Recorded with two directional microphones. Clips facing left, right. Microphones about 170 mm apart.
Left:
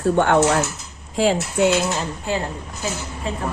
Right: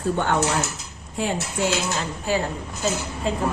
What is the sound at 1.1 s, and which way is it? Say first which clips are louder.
Speech: left 7 dB; 90° left.